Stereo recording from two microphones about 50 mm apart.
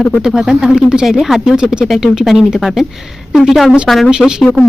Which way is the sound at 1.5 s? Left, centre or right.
Centre.